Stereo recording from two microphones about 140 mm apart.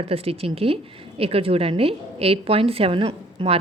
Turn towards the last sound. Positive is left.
turn(degrees=-45)  # may be behind; listen again after turning